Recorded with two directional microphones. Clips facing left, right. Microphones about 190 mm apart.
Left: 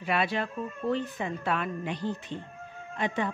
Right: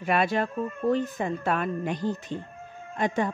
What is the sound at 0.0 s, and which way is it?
Speech, 45° right (ahead or behind).